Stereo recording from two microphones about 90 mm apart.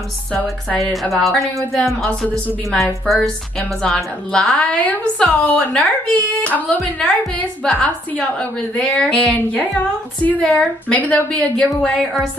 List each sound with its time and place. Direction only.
1.1 s speech: centre (ahead or behind)
2.0 s a woman's voice: 15° left (ahead or behind)
3.8 s a woman's voice: 10° left (ahead or behind)